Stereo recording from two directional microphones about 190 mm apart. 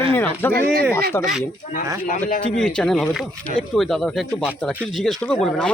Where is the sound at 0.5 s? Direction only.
55° right (ahead or behind).